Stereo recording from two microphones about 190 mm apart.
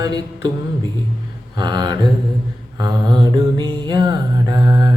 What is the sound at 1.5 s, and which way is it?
Mantra, 20° right (ahead or behind).